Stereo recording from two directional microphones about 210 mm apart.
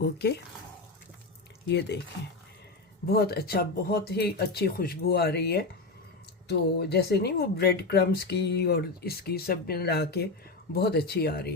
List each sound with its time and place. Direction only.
0.0 s speech: 50° left (ahead or behind)
3.1 s speech: 50° left (ahead or behind)